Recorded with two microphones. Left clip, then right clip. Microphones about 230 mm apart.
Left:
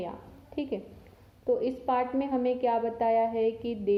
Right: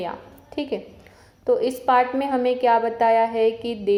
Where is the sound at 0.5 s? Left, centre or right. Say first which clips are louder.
Right 6 dB; centre.